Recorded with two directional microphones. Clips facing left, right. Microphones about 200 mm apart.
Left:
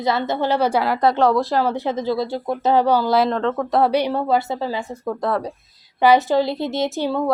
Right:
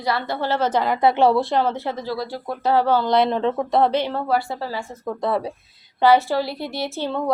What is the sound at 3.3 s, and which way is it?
Speech, 15° right (ahead or behind).